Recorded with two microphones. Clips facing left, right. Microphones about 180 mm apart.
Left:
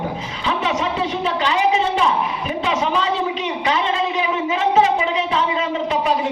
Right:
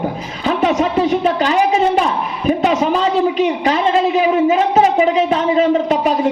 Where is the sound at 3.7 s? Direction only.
40° right (ahead or behind).